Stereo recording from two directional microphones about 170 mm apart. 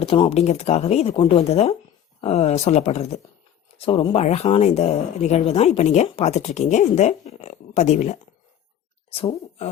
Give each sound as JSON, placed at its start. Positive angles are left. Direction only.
{"t": 0.1, "sound": "speech", "side_deg": 35}